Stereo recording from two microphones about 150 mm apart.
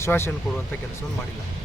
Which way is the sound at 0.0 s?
15° left (ahead or behind).